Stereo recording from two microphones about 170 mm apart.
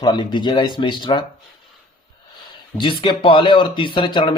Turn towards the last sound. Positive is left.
turn(degrees=25)  # may be behind; listen again after turning